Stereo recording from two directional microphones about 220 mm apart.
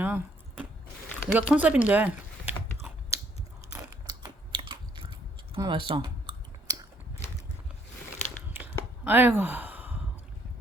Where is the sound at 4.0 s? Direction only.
20° right (ahead or behind).